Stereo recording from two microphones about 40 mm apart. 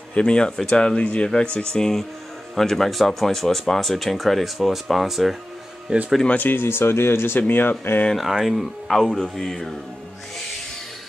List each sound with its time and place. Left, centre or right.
0.1 s speech: left
1.0 s speech: left
2.5 s speech: centre
5.9 s speech: right
6.3 s speech: left
6.6 s speech: left
7.3 s speech: left
8.2 s speech: centre